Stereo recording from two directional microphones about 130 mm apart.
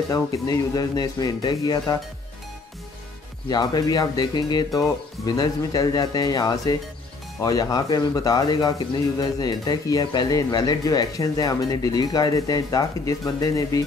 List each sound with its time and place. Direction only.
0.1 s speech: 30° left (ahead or behind)
3.4 s speech: 30° left (ahead or behind)